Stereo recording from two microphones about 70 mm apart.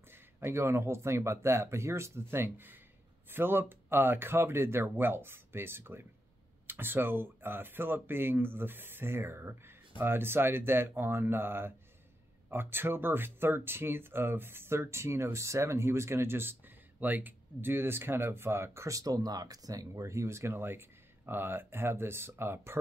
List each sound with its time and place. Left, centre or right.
0.1 s speech: right